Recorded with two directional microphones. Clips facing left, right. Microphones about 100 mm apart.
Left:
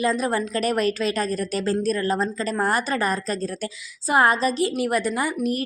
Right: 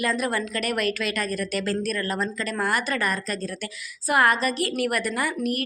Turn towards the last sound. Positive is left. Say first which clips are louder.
# left 2 dB
turn(degrees=25)  # may be behind; listen again after turning